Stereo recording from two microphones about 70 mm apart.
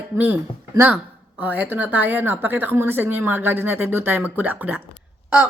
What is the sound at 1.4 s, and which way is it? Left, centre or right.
Speech, right.